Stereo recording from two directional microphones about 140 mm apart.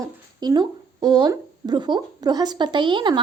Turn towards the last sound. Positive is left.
turn(degrees=-35)  # may be behind; listen again after turning